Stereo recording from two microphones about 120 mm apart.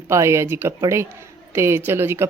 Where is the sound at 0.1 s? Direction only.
25° right (ahead or behind).